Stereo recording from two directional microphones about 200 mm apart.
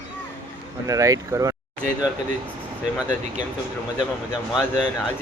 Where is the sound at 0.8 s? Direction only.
15° right (ahead or behind).